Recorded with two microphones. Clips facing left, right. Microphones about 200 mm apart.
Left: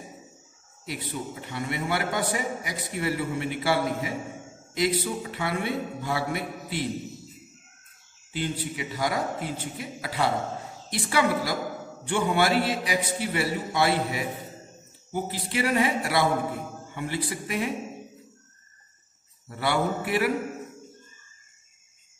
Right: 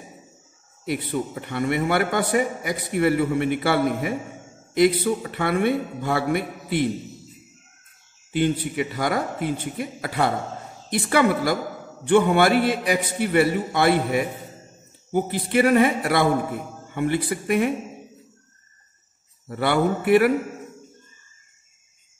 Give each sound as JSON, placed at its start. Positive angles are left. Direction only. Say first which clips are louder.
{"t": 0.8, "sound": "a man's voice", "louder": "right 8 dB", "side_deg": -60}
{"t": 8.3, "sound": "a man's voice", "louder": "right 8 dB", "side_deg": -60}
{"t": 19.6, "sound": "a man's voice", "louder": "right 5 dB", "side_deg": -55}